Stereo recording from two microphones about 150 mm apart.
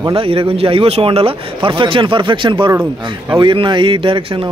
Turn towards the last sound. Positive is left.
turn(degrees=-35)  # may be behind; listen again after turning